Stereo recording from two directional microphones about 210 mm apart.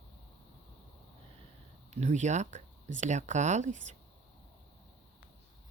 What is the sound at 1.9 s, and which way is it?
Speech, 35° right (ahead or behind).